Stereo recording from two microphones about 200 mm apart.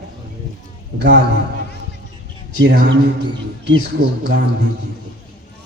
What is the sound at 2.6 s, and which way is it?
Speech, 55° right (ahead or behind).